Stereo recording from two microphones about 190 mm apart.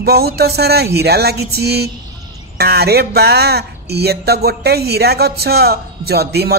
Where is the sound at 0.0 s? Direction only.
55° right (ahead or behind).